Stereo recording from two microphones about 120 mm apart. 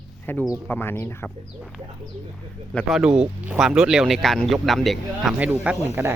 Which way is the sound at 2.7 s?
10° left (ahead or behind).